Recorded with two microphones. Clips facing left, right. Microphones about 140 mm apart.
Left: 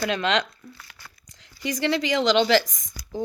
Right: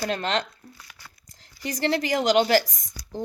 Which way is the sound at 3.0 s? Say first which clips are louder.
Left 2 dB; 90° left.